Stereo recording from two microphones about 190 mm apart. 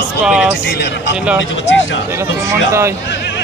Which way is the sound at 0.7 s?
65° left (ahead or behind).